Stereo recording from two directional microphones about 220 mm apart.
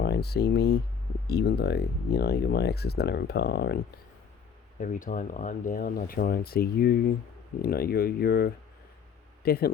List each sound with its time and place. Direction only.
0.0 s speech: 45° left (ahead or behind)